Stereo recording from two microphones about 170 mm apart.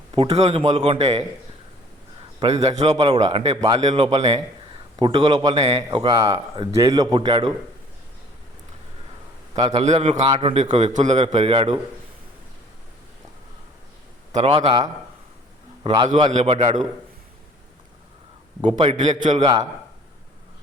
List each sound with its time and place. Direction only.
0.1 s a man's voice: 35° right (ahead or behind)
2.4 s a man's voice: 35° right (ahead or behind)
9.6 s a man's voice: 35° right (ahead or behind)
14.3 s a man's voice: 35° right (ahead or behind)
18.6 s a man's voice: 35° right (ahead or behind)